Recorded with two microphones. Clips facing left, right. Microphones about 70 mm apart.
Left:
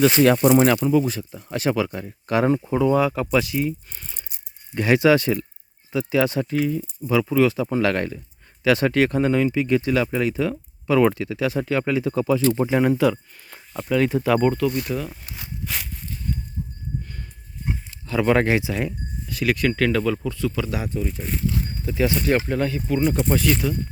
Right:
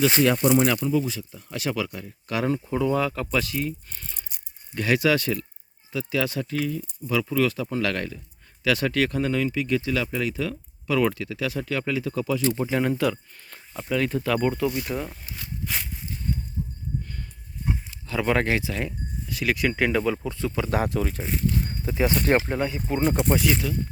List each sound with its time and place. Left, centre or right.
0.2 s speech: left
2.7 s speech: centre
4.7 s speech: left
12.8 s speech: centre
14.6 s speech: centre
15.3 s speech: left
15.6 s speech: centre
17.9 s speech: centre; by 20.7 s right
20.7 s speech: right
20.9 s speech: right
21.7 s speech: right
22.5 s speech: centre
22.9 s speech: right
23.3 s speech: centre